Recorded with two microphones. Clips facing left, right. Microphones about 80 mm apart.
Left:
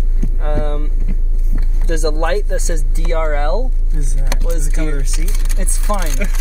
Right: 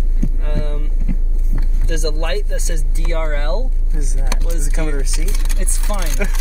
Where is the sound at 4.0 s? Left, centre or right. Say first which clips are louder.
Even; right.